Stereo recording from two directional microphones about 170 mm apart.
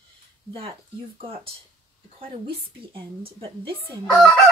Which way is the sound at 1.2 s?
35° right (ahead or behind).